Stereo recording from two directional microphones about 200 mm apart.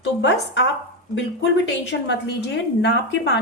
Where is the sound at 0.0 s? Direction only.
65° left (ahead or behind).